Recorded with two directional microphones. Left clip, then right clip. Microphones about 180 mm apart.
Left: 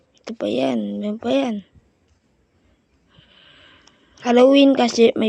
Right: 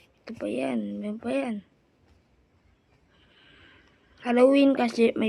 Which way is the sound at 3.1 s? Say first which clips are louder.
Left 7 dB; 25° left (ahead or behind).